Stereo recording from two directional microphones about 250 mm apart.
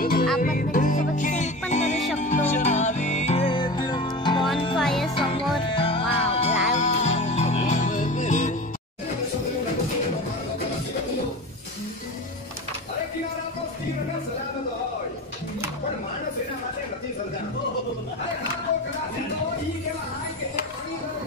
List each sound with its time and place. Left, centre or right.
0.0 s music: left; by 4.5 s centre
4.7 s music: centre
5.8 s music: left